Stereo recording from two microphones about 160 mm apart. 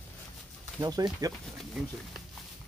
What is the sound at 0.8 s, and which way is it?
Speech, 25° right (ahead or behind).